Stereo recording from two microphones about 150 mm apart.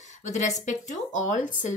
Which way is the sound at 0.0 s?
50° left (ahead or behind).